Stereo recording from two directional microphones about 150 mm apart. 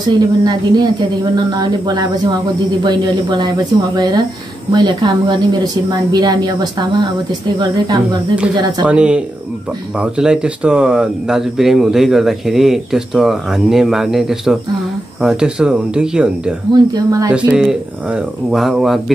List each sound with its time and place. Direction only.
0.1 s a woman's voice: 30° right (ahead or behind)
8.5 s a woman's voice: 25° right (ahead or behind)
8.8 s speech: 10° right (ahead or behind)
16.9 s a woman's voice: 25° right (ahead or behind)
17.3 s speech: 10° right (ahead or behind)